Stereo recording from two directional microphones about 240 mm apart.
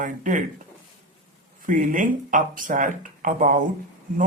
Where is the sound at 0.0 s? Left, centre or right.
Right.